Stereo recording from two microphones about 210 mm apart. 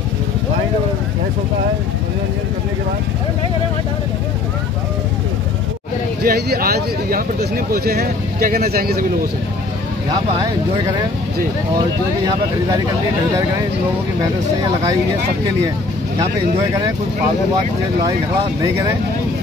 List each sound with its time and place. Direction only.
6.2 s speech: 45° right (ahead or behind)